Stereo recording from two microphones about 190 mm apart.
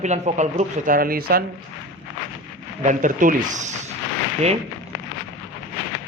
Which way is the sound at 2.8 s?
45° right (ahead or behind).